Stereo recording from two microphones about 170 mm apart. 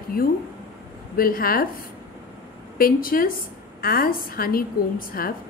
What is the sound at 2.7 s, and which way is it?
A woman's voice, 60° left (ahead or behind).